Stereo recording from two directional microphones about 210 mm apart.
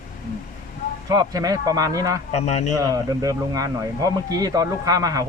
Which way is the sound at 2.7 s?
15° right (ahead or behind).